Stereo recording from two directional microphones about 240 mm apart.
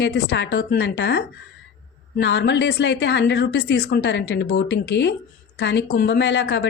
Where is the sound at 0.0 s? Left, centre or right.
Left.